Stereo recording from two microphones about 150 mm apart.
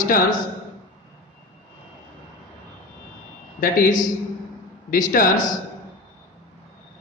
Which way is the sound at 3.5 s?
70° left (ahead or behind).